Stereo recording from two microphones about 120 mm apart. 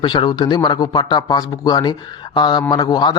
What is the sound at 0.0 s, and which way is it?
A man's voice, 45° left (ahead or behind).